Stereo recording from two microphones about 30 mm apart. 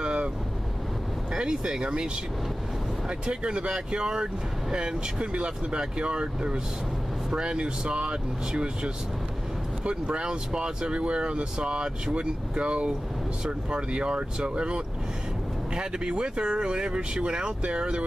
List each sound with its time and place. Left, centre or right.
0.0 s vehicle: right
1.3 s speech: right
3.1 s speech: right